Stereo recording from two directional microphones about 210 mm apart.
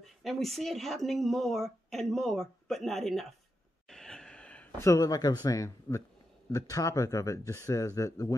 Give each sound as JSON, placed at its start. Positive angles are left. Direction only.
{"t": 0.0, "sound": "speech", "side_deg": 0}
{"t": 3.9, "sound": "gasp", "side_deg": 0}
{"t": 6.5, "sound": "speech", "side_deg": 15}